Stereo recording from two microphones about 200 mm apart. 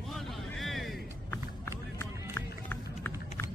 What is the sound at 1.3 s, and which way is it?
Music, 15° left (ahead or behind).